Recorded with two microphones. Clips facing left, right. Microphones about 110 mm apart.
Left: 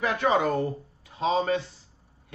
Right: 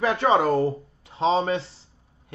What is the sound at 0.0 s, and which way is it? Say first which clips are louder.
Speech: right 4 dB; 30° right (ahead or behind).